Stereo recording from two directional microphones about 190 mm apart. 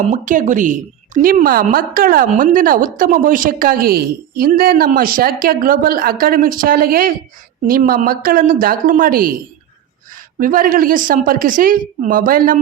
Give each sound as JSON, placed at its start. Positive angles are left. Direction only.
{"t": 0.0, "sound": "a woman's voice", "side_deg": -40}
{"t": 10.4, "sound": "a woman's voice", "side_deg": -45}